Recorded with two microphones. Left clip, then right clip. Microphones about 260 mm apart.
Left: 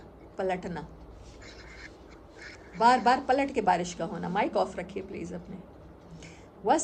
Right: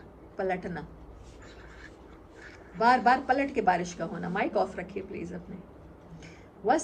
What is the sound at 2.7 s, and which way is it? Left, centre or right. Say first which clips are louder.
A woman's voice: even; centre.